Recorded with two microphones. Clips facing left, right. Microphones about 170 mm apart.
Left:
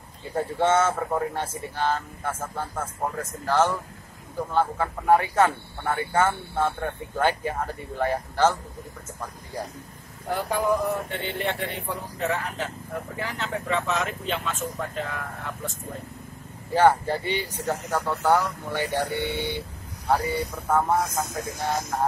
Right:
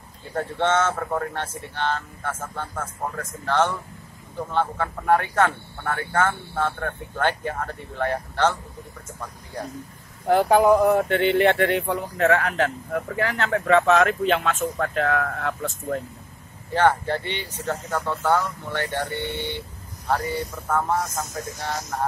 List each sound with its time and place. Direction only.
0.3 s speech: 10° left (ahead or behind)
10.3 s speech: 70° right (ahead or behind)
16.7 s speech: 10° left (ahead or behind)
20.7 s speech: 10° left (ahead or behind)
21.3 s speech: 55° left (ahead or behind)